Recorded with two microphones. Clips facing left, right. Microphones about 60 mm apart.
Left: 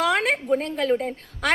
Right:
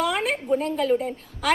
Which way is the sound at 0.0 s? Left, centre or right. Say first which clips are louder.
Left 3 dB; left.